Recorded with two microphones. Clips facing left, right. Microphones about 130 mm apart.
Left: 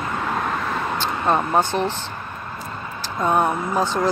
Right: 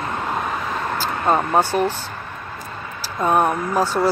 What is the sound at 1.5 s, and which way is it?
Speech, 10° right (ahead or behind).